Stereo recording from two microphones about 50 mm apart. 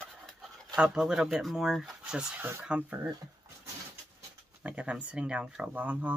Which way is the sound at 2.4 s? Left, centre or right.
Right.